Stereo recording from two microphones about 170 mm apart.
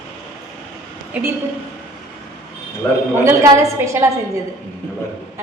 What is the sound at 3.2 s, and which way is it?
A woman's voice, 15° right (ahead or behind).